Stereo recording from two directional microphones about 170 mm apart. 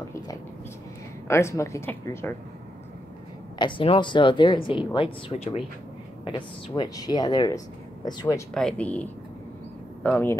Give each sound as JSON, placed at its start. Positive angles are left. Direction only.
{"t": 1.2, "sound": "speech", "side_deg": 15}
{"t": 3.5, "sound": "speech", "side_deg": 30}
{"t": 6.2, "sound": "speech", "side_deg": 30}
{"t": 8.5, "sound": "speech", "side_deg": 5}